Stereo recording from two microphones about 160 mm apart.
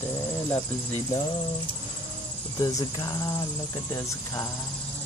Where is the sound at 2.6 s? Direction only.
20° left (ahead or behind).